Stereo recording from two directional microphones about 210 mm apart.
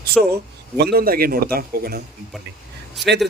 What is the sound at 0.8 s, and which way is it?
Speech, 50° right (ahead or behind).